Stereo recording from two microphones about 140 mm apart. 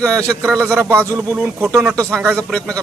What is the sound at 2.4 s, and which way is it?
Speech, 10° left (ahead or behind).